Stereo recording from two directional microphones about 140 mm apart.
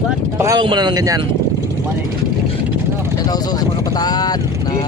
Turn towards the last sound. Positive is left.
turn(degrees=30)  # may be behind; listen again after turning